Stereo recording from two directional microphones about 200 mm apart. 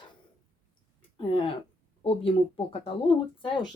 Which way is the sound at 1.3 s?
25° left (ahead or behind).